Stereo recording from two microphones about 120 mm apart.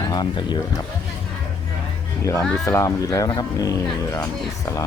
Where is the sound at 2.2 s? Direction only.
20° left (ahead or behind).